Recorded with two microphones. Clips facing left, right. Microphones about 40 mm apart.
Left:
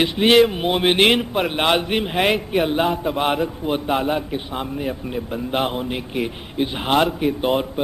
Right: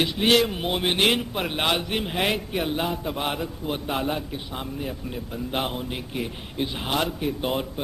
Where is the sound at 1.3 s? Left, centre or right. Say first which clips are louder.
Left 6 dB; centre.